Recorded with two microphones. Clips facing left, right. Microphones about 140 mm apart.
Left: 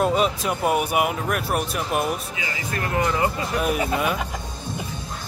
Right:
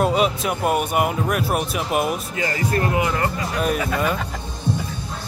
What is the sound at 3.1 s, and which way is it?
Speech, 10° left (ahead or behind).